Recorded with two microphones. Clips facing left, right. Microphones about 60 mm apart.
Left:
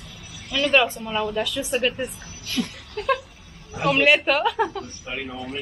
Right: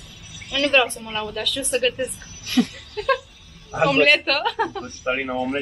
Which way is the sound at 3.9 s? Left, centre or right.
Centre.